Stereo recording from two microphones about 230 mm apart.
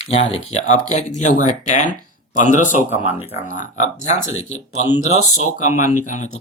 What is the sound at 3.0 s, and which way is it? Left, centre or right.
Speech, centre.